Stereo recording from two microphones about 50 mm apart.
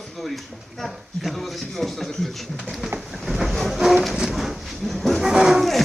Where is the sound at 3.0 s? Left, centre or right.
Centre.